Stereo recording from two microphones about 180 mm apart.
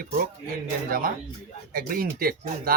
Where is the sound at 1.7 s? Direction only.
50° right (ahead or behind).